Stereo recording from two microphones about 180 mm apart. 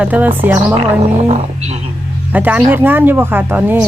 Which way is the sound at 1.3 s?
35° right (ahead or behind).